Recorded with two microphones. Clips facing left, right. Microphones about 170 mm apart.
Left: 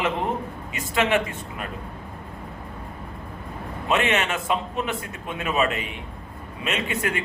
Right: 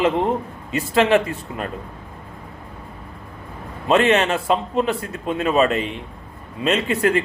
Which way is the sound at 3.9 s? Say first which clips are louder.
Right 7 dB; 35° right (ahead or behind).